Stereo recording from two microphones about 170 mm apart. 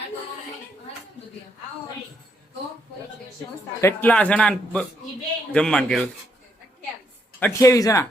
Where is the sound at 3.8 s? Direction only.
10° left (ahead or behind).